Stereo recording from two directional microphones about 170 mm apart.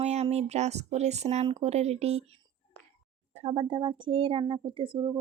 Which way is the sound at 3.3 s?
40° right (ahead or behind).